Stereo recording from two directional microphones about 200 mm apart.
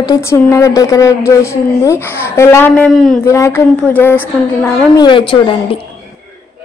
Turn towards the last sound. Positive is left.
turn(degrees=25)  # may be behind; listen again after turning